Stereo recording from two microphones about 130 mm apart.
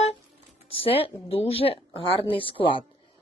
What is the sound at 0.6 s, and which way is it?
A woman's voice, 45° left (ahead or behind).